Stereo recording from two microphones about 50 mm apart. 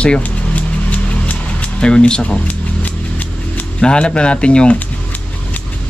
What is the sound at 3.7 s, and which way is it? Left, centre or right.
Speech, centre.